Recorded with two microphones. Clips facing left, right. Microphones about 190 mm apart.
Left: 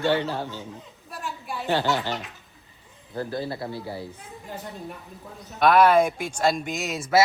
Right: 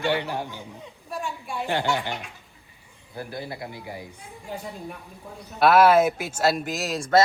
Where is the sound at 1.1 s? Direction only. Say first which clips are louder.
Right 2 dB; centre (ahead or behind).